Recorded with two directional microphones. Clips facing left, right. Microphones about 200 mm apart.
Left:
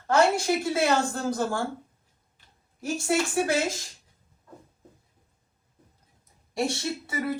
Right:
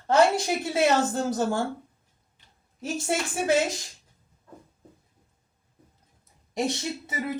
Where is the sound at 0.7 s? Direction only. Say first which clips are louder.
Right 5 dB; 20° right (ahead or behind).